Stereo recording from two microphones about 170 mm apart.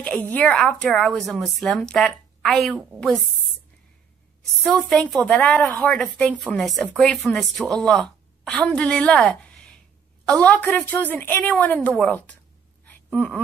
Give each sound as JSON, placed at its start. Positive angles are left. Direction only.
{"t": 0.0, "sound": "a woman's voice", "side_deg": 10}
{"t": 4.8, "sound": "a woman's voice", "side_deg": 5}